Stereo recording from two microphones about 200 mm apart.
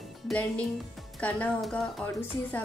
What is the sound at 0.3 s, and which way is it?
A woman's voice, 5° left (ahead or behind).